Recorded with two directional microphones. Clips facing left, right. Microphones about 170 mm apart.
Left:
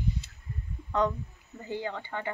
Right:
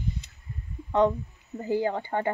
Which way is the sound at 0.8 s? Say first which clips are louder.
Right 5 dB; 25° right (ahead or behind).